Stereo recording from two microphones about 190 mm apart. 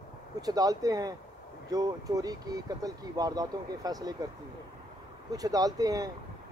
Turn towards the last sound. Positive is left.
turn(degrees=-20)  # may be behind; listen again after turning